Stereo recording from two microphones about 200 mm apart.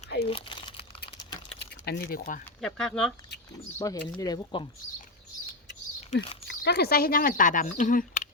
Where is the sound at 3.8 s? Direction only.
20° left (ahead or behind).